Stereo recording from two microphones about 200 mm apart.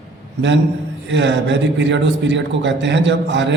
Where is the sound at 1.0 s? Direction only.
60° right (ahead or behind).